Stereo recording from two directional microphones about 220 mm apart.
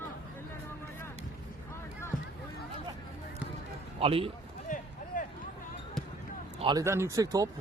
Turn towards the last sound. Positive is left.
turn(degrees=-15)  # may be behind; listen again after turning